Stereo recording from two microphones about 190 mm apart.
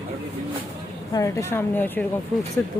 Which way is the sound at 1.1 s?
15° left (ahead or behind).